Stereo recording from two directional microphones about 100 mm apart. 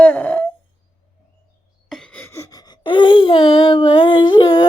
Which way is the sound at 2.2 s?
30° left (ahead or behind).